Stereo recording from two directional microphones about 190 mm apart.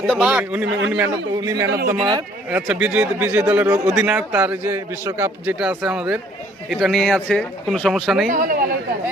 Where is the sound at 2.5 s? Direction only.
5° right (ahead or behind).